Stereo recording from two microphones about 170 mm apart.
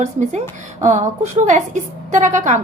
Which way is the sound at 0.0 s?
45° right (ahead or behind).